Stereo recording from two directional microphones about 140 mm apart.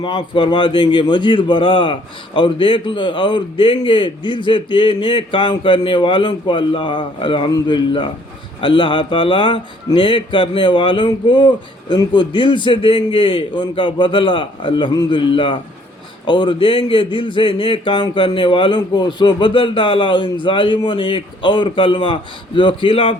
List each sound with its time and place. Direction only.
0.0 s a man's voice: 35° left (ahead or behind)